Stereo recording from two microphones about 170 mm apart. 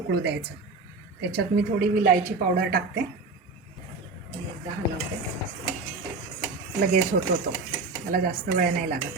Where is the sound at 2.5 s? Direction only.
70° right (ahead or behind).